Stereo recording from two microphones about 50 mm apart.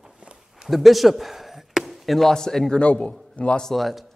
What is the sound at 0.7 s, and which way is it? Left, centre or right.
Speech, centre.